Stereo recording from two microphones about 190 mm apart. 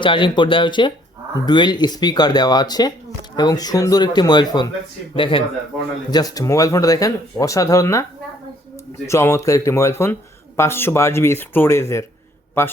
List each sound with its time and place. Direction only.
0.0 s speech: 25° left (ahead or behind)